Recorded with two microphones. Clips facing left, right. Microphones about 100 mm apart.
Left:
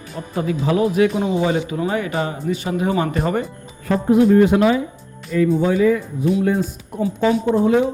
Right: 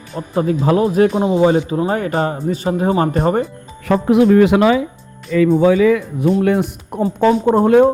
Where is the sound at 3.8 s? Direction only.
85° right.